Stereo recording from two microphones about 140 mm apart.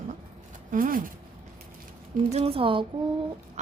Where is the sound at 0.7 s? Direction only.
75° right (ahead or behind).